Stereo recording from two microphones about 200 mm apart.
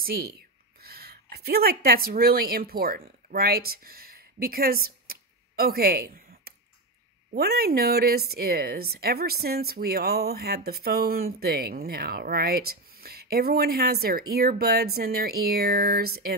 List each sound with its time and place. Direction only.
0.0 s speech: 50° right (ahead or behind)
5.0 s a sound: 50° right (ahead or behind)
7.3 s a woman's voice: 50° right (ahead or behind)